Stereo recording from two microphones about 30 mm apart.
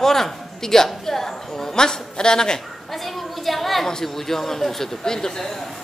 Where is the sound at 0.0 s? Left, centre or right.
Centre.